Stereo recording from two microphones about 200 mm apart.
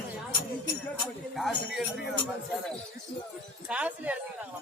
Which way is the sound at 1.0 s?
Centre (ahead or behind).